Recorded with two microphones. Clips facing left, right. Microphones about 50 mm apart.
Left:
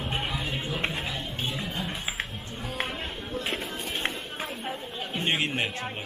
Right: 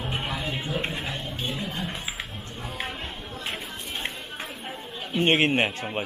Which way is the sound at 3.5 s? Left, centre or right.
Centre.